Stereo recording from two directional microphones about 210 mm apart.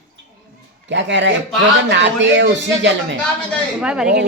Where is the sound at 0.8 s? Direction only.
60° right (ahead or behind).